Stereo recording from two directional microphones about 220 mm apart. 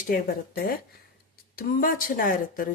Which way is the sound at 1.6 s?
40° left (ahead or behind).